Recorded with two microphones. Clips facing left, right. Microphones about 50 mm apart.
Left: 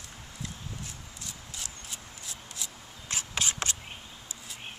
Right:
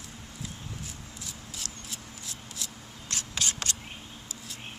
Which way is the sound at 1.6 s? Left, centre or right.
Right.